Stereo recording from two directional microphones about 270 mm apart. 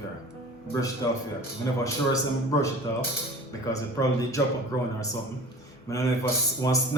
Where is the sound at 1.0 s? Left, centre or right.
Centre.